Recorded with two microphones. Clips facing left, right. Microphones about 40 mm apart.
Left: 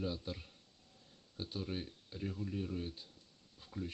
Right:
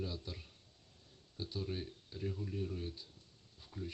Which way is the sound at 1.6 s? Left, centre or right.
Centre.